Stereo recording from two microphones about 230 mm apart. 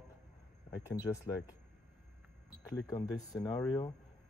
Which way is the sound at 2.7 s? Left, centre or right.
Centre.